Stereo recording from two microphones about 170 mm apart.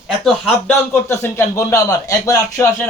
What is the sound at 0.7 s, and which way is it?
Speech, 15° left (ahead or behind).